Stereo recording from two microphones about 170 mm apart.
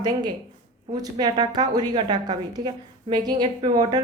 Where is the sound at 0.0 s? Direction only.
25° right (ahead or behind).